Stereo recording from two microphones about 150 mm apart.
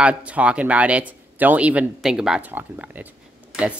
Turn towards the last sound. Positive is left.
turn(degrees=-5)  # may be behind; listen again after turning